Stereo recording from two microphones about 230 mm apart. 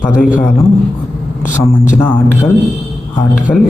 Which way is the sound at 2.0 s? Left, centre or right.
Centre.